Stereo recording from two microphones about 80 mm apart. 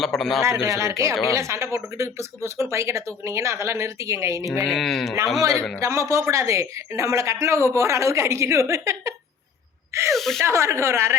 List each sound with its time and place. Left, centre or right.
0.0 s speech: centre
0.6 s speech: right
4.6 s speech: centre
5.8 s speech: right
10.1 s speech: centre
10.4 s speech: right